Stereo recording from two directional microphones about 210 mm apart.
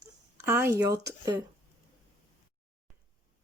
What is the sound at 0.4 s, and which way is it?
Speech, 10° right (ahead or behind).